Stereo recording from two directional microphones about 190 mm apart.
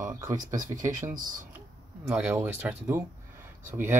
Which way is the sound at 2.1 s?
10° right (ahead or behind).